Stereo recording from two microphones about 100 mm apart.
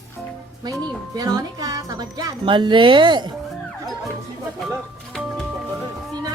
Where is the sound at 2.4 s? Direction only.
50° right (ahead or behind).